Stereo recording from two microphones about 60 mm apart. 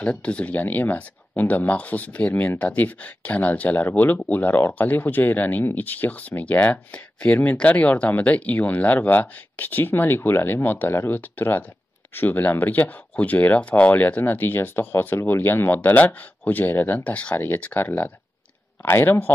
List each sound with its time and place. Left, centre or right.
0.0 s speech: centre; by 15.8 s left
15.8 s speech: left
18.8 s speech: left